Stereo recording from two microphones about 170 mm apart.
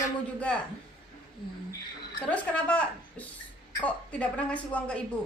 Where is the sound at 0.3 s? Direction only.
5° left (ahead or behind).